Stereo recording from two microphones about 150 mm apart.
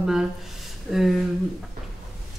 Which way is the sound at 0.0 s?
5° right (ahead or behind).